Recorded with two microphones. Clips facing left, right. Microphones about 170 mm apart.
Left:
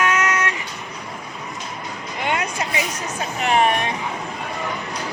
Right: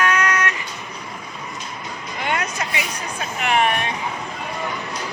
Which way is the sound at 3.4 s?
35° left (ahead or behind).